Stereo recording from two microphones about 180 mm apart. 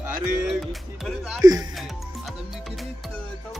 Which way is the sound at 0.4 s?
Centre (ahead or behind).